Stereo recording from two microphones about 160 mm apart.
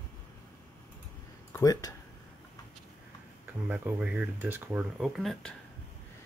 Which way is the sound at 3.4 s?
10° right (ahead or behind).